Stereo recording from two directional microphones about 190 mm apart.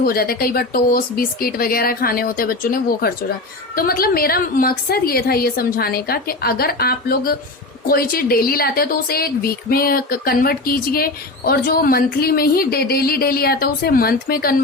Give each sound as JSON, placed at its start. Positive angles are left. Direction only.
{"t": 0.0, "sound": "a woman's voice", "side_deg": 50}